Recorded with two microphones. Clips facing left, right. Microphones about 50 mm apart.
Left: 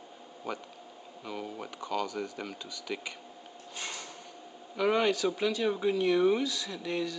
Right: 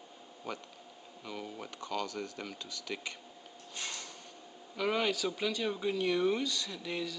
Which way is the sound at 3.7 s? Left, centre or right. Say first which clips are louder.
Left 2 dB; centre.